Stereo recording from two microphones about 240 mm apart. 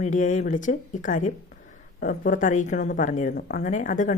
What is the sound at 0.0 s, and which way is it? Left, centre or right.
A woman's voice, left.